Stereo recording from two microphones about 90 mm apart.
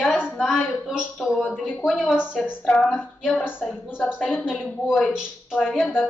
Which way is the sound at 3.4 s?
10° right (ahead or behind).